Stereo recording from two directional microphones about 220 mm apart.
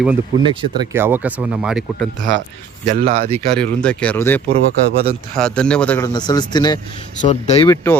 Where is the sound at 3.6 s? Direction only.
5° left (ahead or behind).